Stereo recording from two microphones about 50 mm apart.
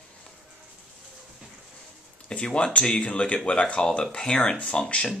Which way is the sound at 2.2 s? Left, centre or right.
Left.